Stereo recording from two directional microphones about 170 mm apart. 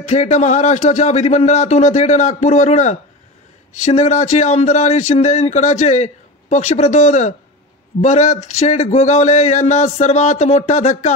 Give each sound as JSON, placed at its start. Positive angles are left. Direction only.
{"t": 0.0, "sound": "speech", "side_deg": 45}